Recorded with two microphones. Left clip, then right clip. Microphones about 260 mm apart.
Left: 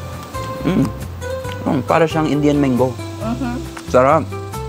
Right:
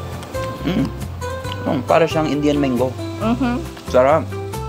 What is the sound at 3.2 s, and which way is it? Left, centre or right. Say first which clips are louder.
Speech: right 4 dB; right.